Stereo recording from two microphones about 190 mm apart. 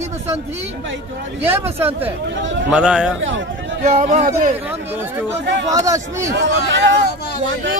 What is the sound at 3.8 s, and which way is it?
Speech, 40° right (ahead or behind).